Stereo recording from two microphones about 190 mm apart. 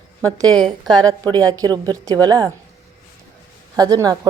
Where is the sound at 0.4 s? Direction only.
20° right (ahead or behind).